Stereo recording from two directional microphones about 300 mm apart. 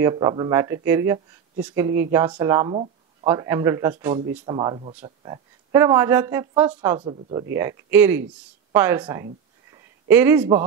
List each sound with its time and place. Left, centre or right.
0.0 s speech: centre